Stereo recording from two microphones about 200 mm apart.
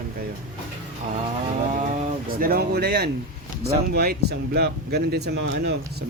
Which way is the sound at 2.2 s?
45° right (ahead or behind).